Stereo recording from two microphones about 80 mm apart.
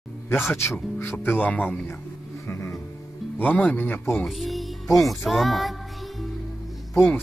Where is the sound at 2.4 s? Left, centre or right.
Left.